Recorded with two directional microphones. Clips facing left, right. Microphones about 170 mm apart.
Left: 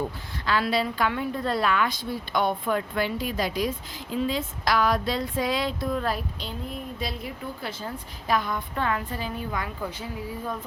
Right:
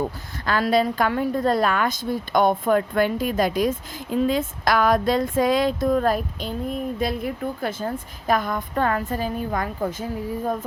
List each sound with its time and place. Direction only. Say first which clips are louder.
0.0 s a woman's voice: right 4 dB; 45° right (ahead or behind)